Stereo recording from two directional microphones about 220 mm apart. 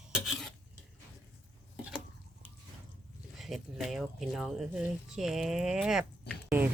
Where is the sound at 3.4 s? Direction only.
Centre (ahead or behind).